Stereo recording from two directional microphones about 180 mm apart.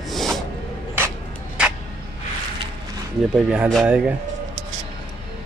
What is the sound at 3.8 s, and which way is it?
Speech, 5° right (ahead or behind).